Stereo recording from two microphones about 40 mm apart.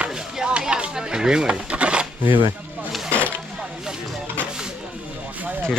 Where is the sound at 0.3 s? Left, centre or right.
Right.